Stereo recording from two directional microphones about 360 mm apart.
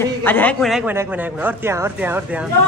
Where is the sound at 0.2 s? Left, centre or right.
Centre.